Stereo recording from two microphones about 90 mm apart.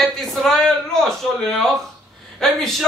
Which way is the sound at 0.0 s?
5° left (ahead or behind).